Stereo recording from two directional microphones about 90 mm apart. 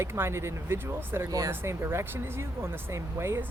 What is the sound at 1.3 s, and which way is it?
Speech, 40° right (ahead or behind).